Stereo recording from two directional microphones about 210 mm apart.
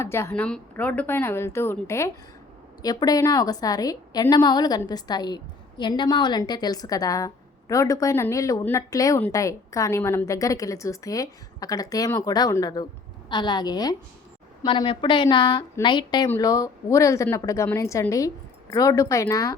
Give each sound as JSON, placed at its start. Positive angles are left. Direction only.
{"t": 0.0, "sound": "a woman's voice", "side_deg": 10}